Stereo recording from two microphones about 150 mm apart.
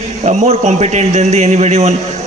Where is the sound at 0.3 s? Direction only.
50° right (ahead or behind).